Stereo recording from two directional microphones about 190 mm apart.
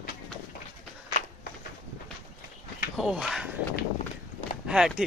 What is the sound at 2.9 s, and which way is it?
Speech, centre (ahead or behind).